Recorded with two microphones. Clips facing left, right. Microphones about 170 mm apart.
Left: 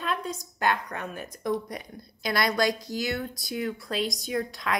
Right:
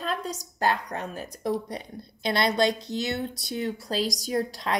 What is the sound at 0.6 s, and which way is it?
A woman's voice, 35° right (ahead or behind).